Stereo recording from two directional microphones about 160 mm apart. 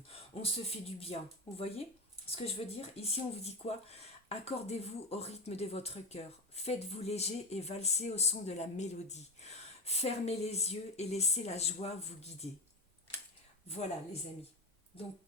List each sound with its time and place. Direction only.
0.1 s speech: 40° left (ahead or behind)
13.7 s speech: 40° left (ahead or behind)